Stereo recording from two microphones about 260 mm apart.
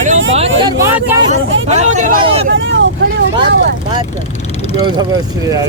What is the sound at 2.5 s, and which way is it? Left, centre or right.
Speech, right.